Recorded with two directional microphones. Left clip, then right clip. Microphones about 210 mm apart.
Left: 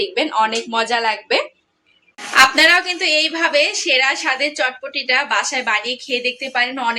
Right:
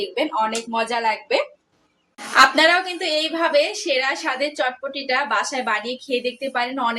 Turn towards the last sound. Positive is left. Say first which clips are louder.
# left 4 dB
turn(degrees=-10)  # may be behind; listen again after turning